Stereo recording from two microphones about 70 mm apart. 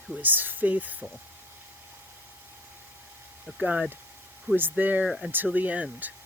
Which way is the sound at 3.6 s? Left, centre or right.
Centre.